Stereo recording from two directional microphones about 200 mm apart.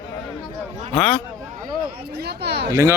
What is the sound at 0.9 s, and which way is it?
Speech, 5° left (ahead or behind).